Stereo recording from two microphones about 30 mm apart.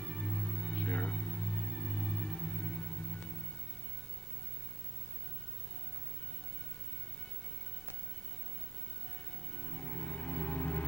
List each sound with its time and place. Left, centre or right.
0.0 s music: left
9.7 s music: left